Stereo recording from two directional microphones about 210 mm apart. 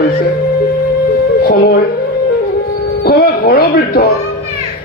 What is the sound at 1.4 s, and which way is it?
Speech, 50° left (ahead or behind).